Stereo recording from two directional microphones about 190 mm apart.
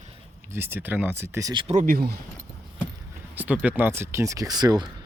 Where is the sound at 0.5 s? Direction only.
10° right (ahead or behind).